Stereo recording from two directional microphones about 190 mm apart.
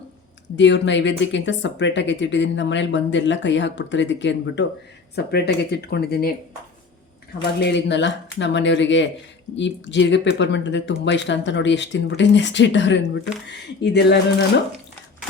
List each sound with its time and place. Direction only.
0.5 s speech: 70° left (ahead or behind)
5.1 s speech: 55° left (ahead or behind)
7.6 s speech: 65° left (ahead or behind)